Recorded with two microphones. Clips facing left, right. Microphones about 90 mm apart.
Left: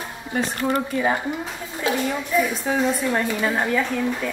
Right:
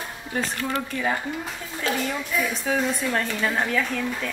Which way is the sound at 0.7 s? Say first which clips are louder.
Left 7 dB; 20° left (ahead or behind).